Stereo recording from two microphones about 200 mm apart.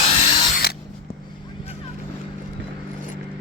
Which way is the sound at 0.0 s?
30° left (ahead or behind).